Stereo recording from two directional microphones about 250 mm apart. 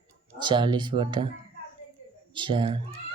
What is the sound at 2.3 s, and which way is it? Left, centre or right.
Speech, centre.